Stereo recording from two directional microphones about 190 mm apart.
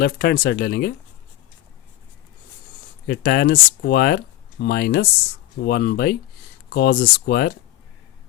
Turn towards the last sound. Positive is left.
turn(degrees=55)  # may be behind; listen again after turning